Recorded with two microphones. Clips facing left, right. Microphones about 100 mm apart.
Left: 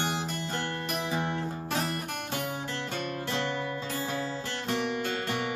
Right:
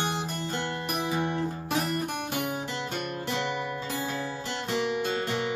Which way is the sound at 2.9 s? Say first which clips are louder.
Left 1 dB; 15° right (ahead or behind).